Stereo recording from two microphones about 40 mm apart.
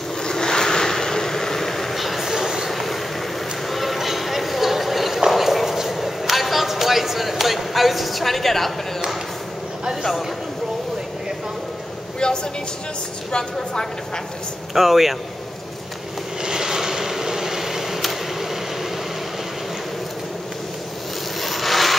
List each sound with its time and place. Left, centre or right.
0.2 s vehicle: centre
2.3 s vehicle: centre
2.7 s vehicle: centre
3.6 s clip-clop: centre
13.3 s a woman's voice: centre
14.7 s speech: centre
16.4 s a sound: centre
21.4 s rub: centre